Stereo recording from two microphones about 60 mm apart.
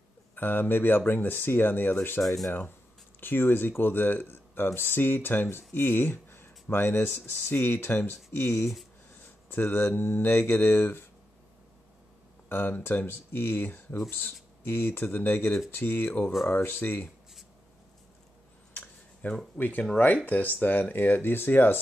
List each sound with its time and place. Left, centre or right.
0.4 s speech: left
2.2 s speech: centre
3.2 s speech: left
9.5 s speech: left
12.4 s speech: left
19.2 s speech: left